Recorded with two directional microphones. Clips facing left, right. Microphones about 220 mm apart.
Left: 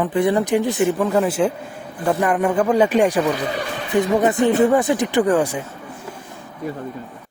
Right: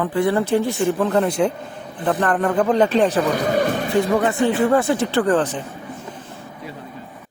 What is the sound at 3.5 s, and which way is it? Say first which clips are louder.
Speech: right 7 dB; 50° right (ahead or behind).